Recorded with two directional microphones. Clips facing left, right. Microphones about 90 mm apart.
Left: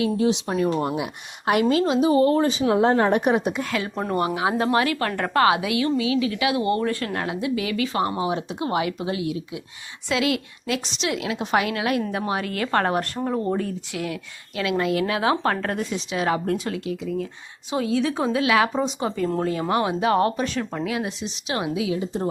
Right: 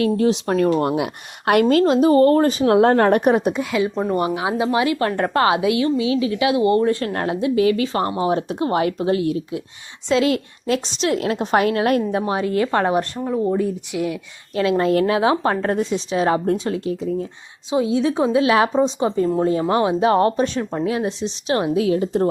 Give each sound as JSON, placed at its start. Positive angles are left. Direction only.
{"t": 0.0, "sound": "a woman's voice", "side_deg": -50}
{"t": 0.8, "sound": "speech", "side_deg": -65}
{"t": 1.9, "sound": "a woman's voice", "side_deg": -50}
{"t": 3.6, "sound": "a woman's voice", "side_deg": -15}
{"t": 7.1, "sound": "speech", "side_deg": -35}
{"t": 12.1, "sound": "a woman's voice", "side_deg": -25}
{"t": 13.1, "sound": "speech", "side_deg": 10}
{"t": 13.6, "sound": "a woman's voice", "side_deg": -20}
{"t": 14.5, "sound": "speech", "side_deg": -35}
{"t": 17.7, "sound": "a woman's voice", "side_deg": -20}